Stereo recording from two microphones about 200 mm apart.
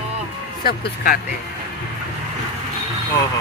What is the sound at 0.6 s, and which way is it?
Speech, 45° left (ahead or behind).